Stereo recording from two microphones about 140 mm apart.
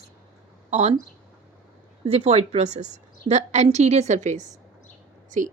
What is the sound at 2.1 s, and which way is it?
A woman's voice, 50° right (ahead or behind).